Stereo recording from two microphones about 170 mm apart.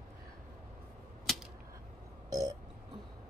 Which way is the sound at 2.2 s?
20° right (ahead or behind).